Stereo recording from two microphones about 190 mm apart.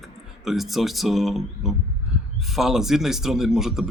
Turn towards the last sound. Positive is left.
turn(degrees=0)  # may be behind; listen again after turning